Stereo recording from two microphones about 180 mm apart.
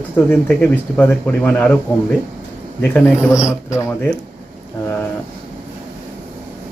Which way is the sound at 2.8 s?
10° left (ahead or behind).